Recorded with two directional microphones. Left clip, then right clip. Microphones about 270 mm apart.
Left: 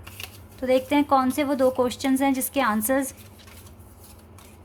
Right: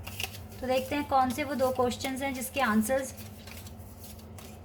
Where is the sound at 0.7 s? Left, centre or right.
Left.